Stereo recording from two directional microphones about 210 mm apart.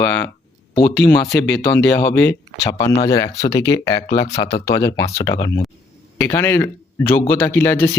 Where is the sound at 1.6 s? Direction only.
50° left (ahead or behind).